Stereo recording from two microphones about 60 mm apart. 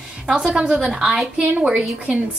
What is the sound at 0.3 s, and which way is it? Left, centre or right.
A woman's voice, centre.